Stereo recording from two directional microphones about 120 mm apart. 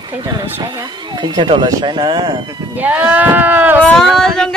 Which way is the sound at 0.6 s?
35° right (ahead or behind).